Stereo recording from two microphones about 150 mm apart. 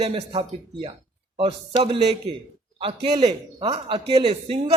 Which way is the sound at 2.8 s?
35° right (ahead or behind).